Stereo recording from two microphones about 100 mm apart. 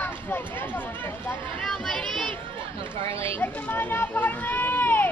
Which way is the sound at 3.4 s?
20° left (ahead or behind).